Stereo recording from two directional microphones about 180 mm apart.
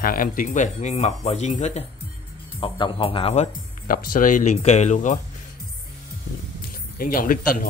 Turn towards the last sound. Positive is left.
turn(degrees=50)  # may be behind; listen again after turning